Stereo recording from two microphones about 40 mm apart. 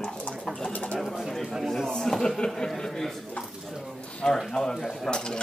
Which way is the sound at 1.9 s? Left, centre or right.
Centre.